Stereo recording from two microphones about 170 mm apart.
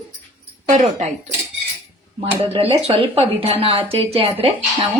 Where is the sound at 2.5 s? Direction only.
30° right (ahead or behind).